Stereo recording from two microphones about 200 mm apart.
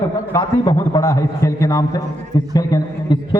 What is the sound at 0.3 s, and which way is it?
A man's voice, 20° left (ahead or behind).